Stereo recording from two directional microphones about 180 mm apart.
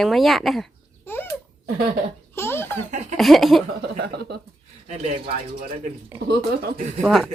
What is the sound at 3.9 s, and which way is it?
Speech, 65° right (ahead or behind).